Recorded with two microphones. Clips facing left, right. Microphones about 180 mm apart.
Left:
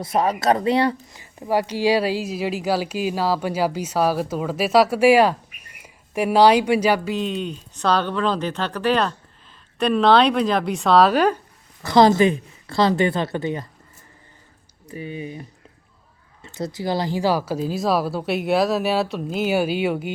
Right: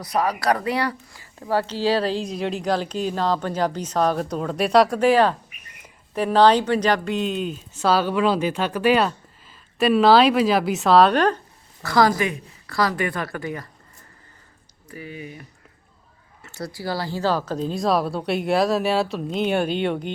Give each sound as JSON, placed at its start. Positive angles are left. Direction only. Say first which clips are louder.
{"t": 0.0, "sound": "speech", "louder": "left 2 dB", "side_deg": 25}
{"t": 11.8, "sound": "speech", "louder": "left 5 dB", "side_deg": 20}
{"t": 14.8, "sound": "speech", "louder": "left 5 dB", "side_deg": 25}